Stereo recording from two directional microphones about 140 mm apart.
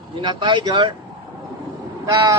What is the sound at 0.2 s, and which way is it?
Speech, 35° right (ahead or behind).